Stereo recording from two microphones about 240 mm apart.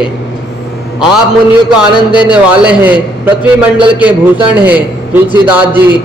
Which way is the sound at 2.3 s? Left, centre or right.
Centre.